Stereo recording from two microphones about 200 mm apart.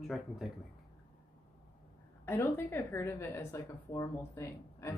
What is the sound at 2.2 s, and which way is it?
A woman's voice, 10° left (ahead or behind).